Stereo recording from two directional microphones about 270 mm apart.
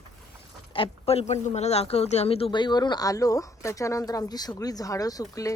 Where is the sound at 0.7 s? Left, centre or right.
Left.